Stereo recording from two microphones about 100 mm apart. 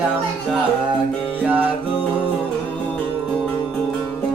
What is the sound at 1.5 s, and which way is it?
Music, 15° right (ahead or behind).